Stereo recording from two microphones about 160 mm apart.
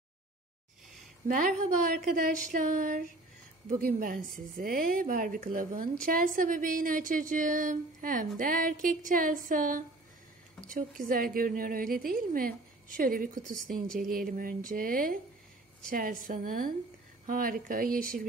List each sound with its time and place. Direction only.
1.2 s a woman's voice: 55° right (ahead or behind)
11.1 s speech: 65° right (ahead or behind)